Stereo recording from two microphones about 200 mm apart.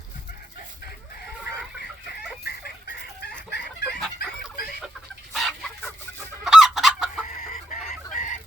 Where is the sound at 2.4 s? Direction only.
55° left (ahead or behind).